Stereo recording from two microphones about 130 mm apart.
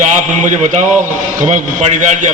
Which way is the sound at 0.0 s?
65° right (ahead or behind).